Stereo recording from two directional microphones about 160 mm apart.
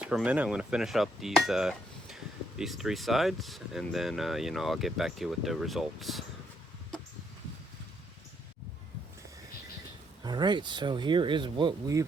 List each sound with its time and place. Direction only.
0.0 s speech: 5° right (ahead or behind)
10.2 s speech: 25° right (ahead or behind)